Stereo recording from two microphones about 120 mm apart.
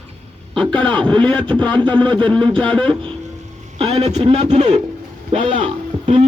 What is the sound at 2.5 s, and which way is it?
Speech, 10° left (ahead or behind).